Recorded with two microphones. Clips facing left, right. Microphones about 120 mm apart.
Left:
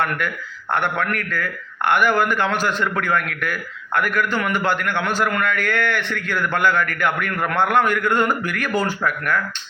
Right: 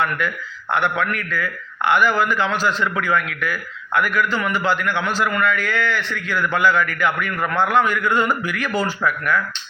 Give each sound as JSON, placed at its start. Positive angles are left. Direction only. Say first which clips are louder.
{"t": 0.2, "sound": "a man's voice", "louder": "right 1 dB", "side_deg": 55}